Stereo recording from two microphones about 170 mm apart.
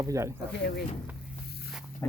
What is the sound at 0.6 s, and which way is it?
Speech, 75° left (ahead or behind).